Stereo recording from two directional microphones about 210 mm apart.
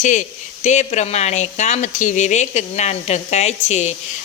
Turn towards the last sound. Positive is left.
turn(degrees=30)  # may be behind; listen again after turning